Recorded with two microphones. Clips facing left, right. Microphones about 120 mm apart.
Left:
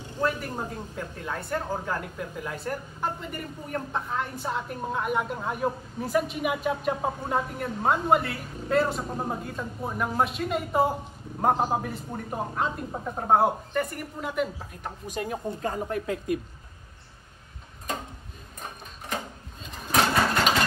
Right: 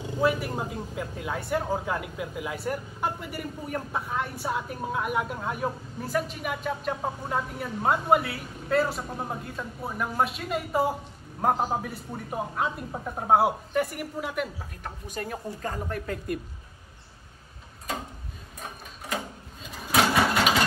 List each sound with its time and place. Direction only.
0.2 s speech: 10° right (ahead or behind)
15.4 s speech: 20° left (ahead or behind)
15.8 s speech: 10° left (ahead or behind)
19.6 s engine: 5° right (ahead or behind)